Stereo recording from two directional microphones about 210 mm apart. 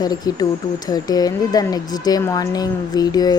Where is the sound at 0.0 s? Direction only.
20° left (ahead or behind).